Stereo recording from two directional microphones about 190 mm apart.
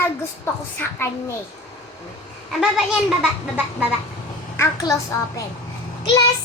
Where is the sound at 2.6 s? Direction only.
Centre (ahead or behind).